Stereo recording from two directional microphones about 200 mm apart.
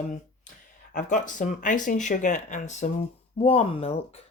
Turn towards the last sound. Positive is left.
turn(degrees=30)  # may be behind; listen again after turning